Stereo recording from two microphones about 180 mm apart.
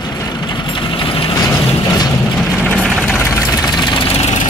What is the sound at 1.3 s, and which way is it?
Vehicle, 20° left (ahead or behind).